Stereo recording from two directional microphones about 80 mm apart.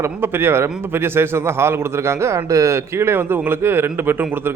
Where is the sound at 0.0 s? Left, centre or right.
Right.